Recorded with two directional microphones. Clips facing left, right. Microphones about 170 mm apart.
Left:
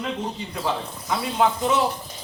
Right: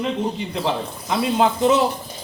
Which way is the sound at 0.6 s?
25° right (ahead or behind).